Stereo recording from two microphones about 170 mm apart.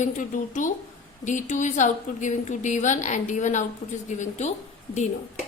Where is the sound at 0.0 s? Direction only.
50° left (ahead or behind).